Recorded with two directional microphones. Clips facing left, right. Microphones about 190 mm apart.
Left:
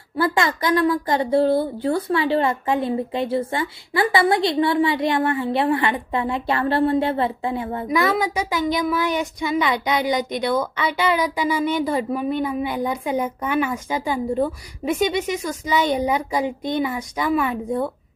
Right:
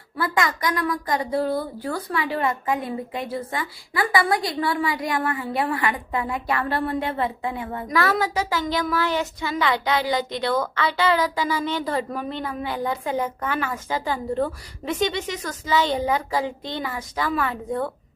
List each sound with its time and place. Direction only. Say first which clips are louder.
0.2 s a woman's voice: left 3 dB; 30° left (ahead or behind)
7.9 s speech: left 2 dB; 10° left (ahead or behind)